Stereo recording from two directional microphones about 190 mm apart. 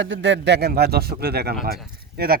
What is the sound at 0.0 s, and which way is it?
A man's voice, 70° right (ahead or behind).